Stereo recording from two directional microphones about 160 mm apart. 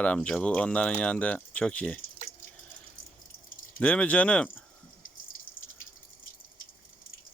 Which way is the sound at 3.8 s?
10° left (ahead or behind).